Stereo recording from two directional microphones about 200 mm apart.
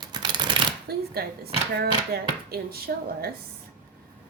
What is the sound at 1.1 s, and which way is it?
Speech, 50° right (ahead or behind).